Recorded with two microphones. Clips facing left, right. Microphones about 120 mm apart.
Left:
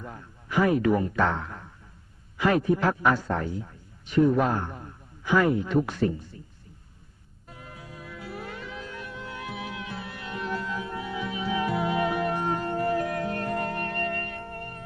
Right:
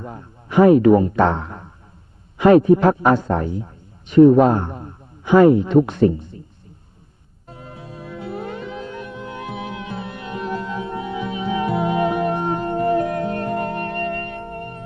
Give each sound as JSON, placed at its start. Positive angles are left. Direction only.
{"t": 0.0, "sound": "a man's voice", "side_deg": -30}
{"t": 1.3, "sound": "a sound", "side_deg": -25}
{"t": 2.4, "sound": "a man's voice", "side_deg": -25}
{"t": 7.4, "sound": "music", "side_deg": -30}